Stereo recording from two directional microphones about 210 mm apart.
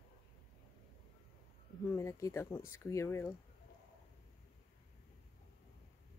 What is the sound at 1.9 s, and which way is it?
A woman's voice, 15° left (ahead or behind).